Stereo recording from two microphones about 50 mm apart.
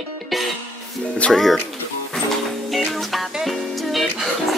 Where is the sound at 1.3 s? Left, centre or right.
Centre.